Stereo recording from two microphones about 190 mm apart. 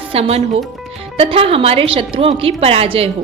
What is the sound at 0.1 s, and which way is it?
A woman's voice, 30° right (ahead or behind).